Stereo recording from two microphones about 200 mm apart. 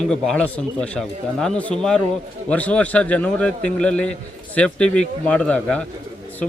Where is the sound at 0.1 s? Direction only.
5° left (ahead or behind).